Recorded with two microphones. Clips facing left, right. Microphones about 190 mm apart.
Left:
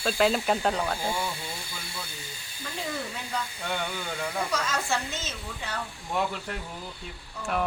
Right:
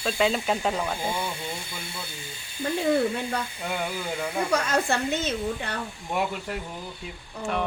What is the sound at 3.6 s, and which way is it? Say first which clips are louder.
Speech: right 2 dB; 5° right (ahead or behind).